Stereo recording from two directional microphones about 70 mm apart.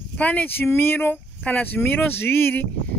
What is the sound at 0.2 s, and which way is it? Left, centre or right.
Speech, centre.